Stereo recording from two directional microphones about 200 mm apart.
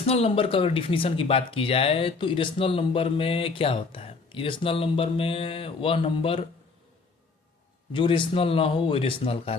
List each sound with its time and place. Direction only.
0.0 s speech: 30° left (ahead or behind)
7.9 s speech: 25° left (ahead or behind)